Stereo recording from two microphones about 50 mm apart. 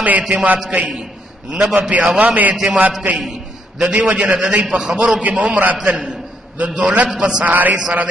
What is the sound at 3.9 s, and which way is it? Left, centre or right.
A man's voice, right.